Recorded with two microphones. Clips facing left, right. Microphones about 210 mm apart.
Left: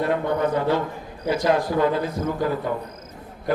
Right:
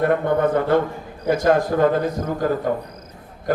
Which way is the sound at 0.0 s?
55° right (ahead or behind).